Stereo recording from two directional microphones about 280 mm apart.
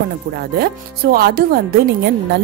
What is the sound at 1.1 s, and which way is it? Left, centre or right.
Speech, right.